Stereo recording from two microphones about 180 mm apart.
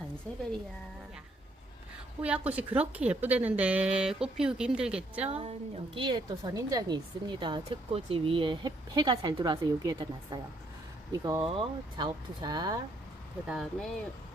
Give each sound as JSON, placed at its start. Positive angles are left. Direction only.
{"t": 2.2, "sound": "speech", "side_deg": -5}
{"t": 5.3, "sound": "a woman's voice", "side_deg": -35}
{"t": 11.4, "sound": "a woman's voice", "side_deg": -30}
{"t": 13.5, "sound": "speech", "side_deg": 0}